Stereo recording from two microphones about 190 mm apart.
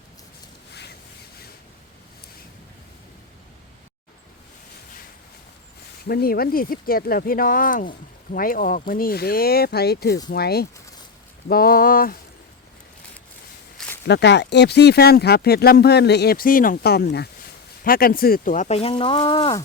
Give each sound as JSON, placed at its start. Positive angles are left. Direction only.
{"t": 6.1, "sound": "speech", "side_deg": 55}
{"t": 13.7, "sound": "a sound", "side_deg": 5}
{"t": 14.1, "sound": "speech", "side_deg": 65}